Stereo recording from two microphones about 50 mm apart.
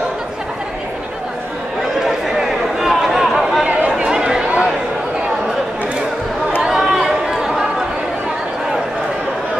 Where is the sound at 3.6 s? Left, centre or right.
Right.